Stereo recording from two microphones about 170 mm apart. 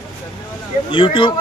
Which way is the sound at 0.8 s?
30° left (ahead or behind).